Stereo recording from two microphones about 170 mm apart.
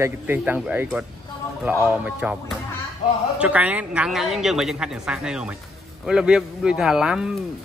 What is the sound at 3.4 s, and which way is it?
A woman's voice, 10° right (ahead or behind).